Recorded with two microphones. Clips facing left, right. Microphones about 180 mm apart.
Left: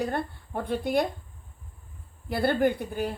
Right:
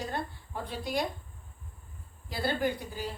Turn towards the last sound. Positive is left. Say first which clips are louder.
# left 7 dB
turn(degrees=60)  # may be behind; listen again after turning